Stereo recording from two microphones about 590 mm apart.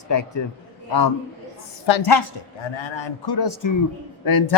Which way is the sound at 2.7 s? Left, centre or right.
Left.